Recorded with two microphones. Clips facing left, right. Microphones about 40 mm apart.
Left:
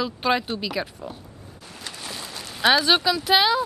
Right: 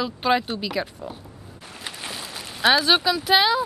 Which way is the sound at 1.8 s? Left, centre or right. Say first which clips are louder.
Right 2 dB; right.